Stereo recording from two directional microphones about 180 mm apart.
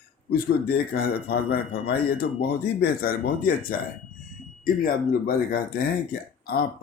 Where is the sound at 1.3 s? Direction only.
60° left (ahead or behind).